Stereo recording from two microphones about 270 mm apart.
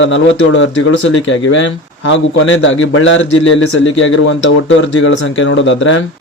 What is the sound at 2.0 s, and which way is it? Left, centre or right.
Speech, left.